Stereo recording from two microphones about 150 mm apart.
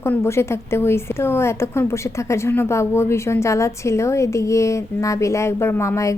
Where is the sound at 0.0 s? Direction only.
15° left (ahead or behind).